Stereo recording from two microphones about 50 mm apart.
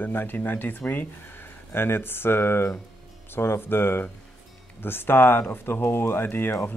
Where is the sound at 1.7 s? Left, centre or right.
Left.